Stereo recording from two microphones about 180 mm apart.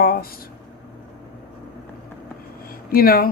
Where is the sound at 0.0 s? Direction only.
55° left (ahead or behind).